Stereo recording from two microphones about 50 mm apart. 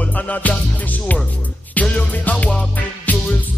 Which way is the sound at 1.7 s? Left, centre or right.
Left.